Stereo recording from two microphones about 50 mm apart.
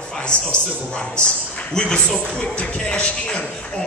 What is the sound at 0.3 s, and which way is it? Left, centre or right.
Speech, left.